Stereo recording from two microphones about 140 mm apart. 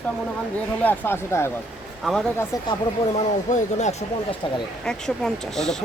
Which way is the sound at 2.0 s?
5° left (ahead or behind).